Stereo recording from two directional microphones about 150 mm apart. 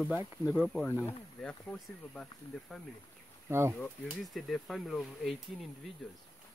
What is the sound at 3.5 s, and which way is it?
Speech, 15° right (ahead or behind).